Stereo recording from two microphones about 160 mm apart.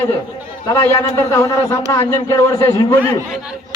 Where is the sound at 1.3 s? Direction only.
20° left (ahead or behind).